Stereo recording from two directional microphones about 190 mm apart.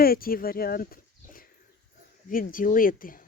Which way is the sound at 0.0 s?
50° left (ahead or behind).